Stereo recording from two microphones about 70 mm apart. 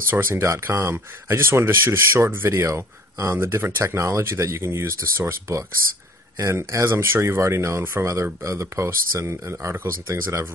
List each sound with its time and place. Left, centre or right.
0.1 s speech: right